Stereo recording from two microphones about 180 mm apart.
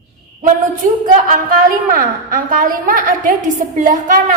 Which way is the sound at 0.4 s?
50° right (ahead or behind).